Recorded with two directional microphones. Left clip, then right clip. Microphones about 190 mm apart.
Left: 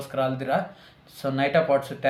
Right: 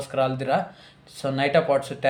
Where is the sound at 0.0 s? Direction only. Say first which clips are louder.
Right 2 dB; 30° right (ahead or behind).